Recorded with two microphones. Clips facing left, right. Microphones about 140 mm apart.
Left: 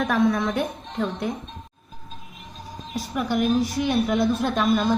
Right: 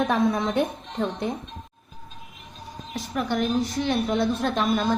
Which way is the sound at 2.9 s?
5° left (ahead or behind).